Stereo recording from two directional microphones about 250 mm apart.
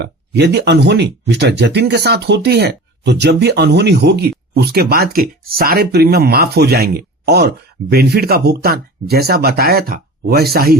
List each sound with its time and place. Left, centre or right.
0.0 s speech: right